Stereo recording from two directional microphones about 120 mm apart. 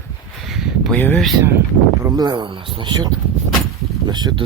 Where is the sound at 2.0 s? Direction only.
35° right (ahead or behind).